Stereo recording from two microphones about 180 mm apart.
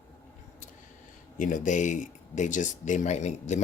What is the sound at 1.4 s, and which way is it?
Speech, 45° left (ahead or behind).